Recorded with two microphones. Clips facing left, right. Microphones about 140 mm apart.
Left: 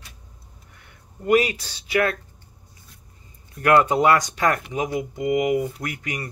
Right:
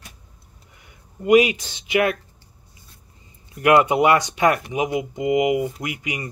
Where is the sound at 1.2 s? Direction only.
15° right (ahead or behind).